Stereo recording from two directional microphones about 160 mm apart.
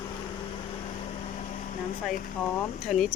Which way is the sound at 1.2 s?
45° left (ahead or behind).